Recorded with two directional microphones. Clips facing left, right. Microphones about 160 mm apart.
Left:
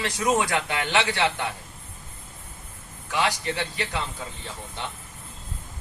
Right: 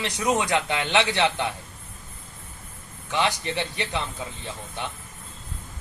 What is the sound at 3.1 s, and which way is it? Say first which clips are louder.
Speech: right 1 dB; 20° right (ahead or behind).